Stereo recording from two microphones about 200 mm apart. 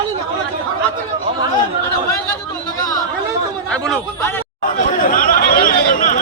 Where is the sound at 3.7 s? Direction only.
5° left (ahead or behind).